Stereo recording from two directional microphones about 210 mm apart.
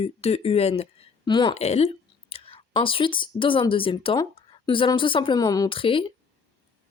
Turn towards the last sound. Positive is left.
turn(degrees=25)  # may be behind; listen again after turning